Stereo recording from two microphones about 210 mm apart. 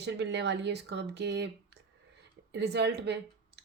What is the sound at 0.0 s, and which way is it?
A woman's voice, 55° right (ahead or behind).